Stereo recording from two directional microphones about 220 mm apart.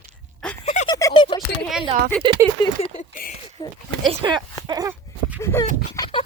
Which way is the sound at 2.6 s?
25° left (ahead or behind).